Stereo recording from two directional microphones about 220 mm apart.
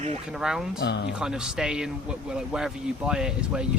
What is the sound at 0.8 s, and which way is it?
Speech, 50° left (ahead or behind).